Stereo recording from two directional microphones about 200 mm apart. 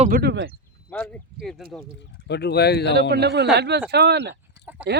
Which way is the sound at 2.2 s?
55° left (ahead or behind).